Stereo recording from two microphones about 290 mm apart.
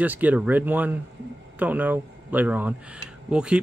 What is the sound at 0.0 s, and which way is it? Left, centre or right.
Speech, centre.